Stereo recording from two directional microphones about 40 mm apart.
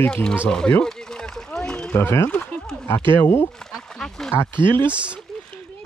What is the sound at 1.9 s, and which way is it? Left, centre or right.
Speech, left.